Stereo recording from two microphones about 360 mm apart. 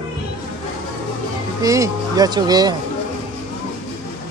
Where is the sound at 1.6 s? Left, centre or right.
Centre.